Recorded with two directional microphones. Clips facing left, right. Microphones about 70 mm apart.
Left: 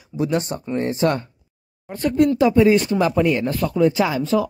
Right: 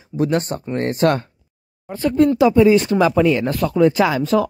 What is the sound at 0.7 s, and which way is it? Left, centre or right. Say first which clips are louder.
Speech: right 3 dB; right.